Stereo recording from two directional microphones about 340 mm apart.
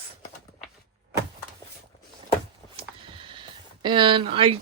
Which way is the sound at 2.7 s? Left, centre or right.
Centre.